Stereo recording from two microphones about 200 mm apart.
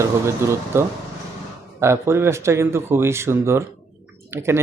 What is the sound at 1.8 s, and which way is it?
Speech, 15° right (ahead or behind).